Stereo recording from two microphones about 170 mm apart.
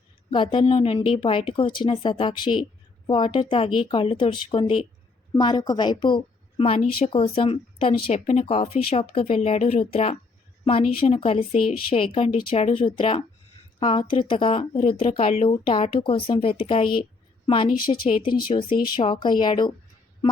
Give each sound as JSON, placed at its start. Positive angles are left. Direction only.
{"t": 0.3, "sound": "a woman's voice", "side_deg": 30}